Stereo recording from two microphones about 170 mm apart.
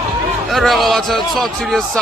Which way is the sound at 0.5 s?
Centre (ahead or behind).